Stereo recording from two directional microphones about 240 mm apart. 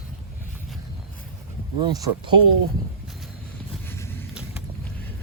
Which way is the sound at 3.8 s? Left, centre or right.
Centre.